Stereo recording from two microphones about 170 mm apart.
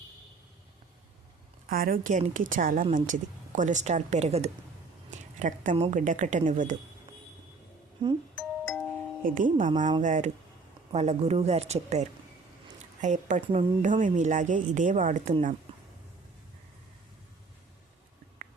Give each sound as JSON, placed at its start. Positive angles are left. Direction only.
{"t": 1.7, "sound": "speech", "side_deg": -55}
{"t": 8.0, "sound": "speech", "side_deg": -30}
{"t": 8.4, "sound": "music", "side_deg": 5}
{"t": 9.2, "sound": "speech", "side_deg": -50}